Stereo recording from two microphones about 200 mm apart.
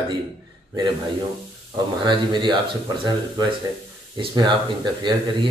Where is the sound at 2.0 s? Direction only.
25° right (ahead or behind).